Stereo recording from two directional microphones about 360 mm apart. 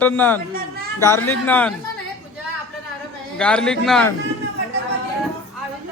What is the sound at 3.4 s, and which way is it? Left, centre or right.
Speech, centre.